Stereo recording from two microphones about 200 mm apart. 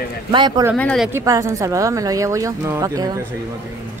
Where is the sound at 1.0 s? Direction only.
15° right (ahead or behind).